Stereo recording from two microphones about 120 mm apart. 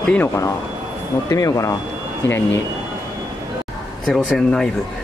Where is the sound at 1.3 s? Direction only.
25° left (ahead or behind).